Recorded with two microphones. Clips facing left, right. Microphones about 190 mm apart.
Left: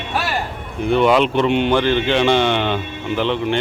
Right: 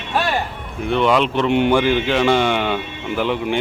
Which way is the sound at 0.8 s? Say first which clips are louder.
Left 2 dB; centre (ahead or behind).